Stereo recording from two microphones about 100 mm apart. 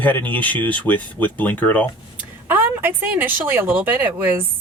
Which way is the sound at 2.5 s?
20° right (ahead or behind).